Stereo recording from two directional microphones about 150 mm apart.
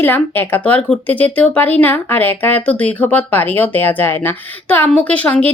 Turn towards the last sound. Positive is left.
turn(degrees=10)  # may be behind; listen again after turning